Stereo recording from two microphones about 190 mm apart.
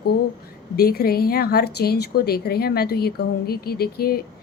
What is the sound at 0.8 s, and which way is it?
A woman's voice, 55° left (ahead or behind).